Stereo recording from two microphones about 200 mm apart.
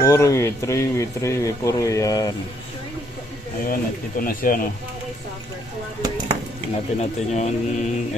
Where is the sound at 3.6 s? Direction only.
45° left (ahead or behind).